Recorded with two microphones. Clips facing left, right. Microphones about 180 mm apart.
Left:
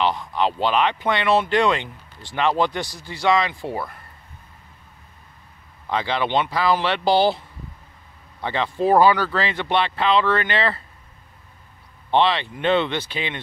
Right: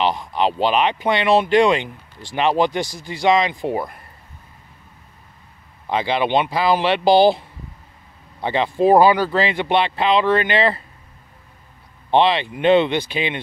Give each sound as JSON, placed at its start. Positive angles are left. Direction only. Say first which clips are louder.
{"t": 0.0, "sound": "speech", "louder": "right 2 dB", "side_deg": -15}
{"t": 5.9, "sound": "speech", "louder": "right 3 dB", "side_deg": -15}
{"t": 12.1, "sound": "speech", "louder": "right 3 dB", "side_deg": -15}